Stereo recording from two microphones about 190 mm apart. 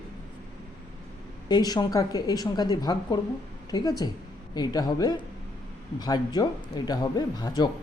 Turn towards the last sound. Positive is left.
turn(degrees=20)  # may be behind; listen again after turning